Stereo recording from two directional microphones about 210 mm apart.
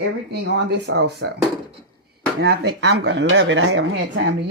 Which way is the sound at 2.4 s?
50° right (ahead or behind).